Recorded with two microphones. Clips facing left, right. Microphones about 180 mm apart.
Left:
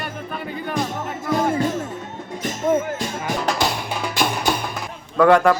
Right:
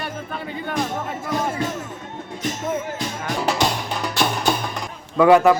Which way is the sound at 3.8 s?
10° left (ahead or behind).